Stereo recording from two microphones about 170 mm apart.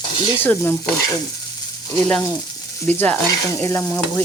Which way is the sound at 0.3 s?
10° left (ahead or behind).